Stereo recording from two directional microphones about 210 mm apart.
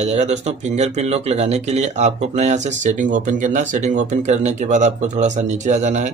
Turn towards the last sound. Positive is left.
turn(degrees=-35)  # may be behind; listen again after turning